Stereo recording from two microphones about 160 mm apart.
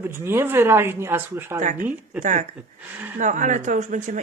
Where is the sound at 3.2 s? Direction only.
50° right (ahead or behind).